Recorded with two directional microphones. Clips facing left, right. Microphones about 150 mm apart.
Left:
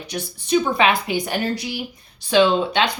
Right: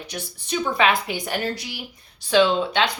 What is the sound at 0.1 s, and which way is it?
A woman's voice, 20° left (ahead or behind).